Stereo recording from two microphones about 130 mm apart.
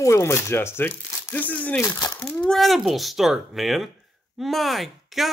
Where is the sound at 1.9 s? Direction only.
30° left (ahead or behind).